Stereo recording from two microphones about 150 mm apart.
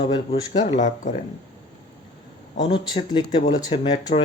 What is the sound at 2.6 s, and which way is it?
A man's voice, 30° left (ahead or behind).